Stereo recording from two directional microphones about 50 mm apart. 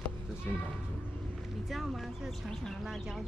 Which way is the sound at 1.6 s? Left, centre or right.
Centre.